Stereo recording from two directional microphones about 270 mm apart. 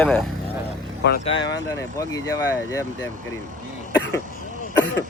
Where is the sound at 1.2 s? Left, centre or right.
Centre.